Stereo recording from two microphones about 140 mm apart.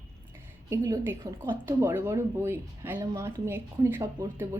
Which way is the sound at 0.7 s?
25° right (ahead or behind).